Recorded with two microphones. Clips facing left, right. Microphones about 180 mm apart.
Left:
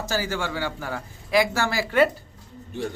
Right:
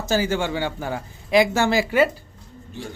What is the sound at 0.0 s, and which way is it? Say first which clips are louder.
Speech: right 5 dB; 20° right (ahead or behind).